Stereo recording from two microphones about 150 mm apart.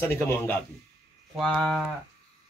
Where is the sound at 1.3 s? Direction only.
Centre (ahead or behind).